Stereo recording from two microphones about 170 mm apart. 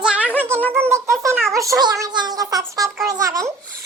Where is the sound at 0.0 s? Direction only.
5° right (ahead or behind).